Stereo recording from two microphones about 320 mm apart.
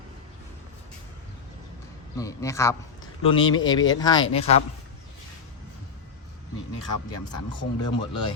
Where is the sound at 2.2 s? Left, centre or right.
Centre.